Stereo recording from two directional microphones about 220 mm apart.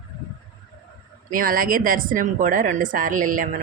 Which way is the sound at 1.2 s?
40° right (ahead or behind).